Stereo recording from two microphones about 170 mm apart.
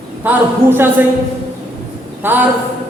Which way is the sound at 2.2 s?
10° right (ahead or behind).